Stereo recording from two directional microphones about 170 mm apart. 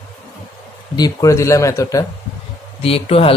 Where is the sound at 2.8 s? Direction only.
35° left (ahead or behind).